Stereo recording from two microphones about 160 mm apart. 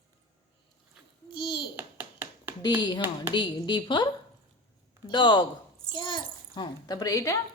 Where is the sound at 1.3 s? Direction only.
30° left (ahead or behind).